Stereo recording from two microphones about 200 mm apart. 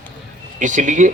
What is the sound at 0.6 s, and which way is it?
Speech, 40° right (ahead or behind).